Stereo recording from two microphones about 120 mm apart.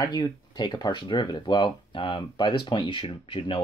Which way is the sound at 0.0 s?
35° left (ahead or behind).